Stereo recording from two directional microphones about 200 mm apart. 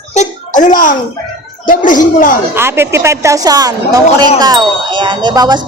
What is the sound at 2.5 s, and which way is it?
A woman's voice, 10° right (ahead or behind).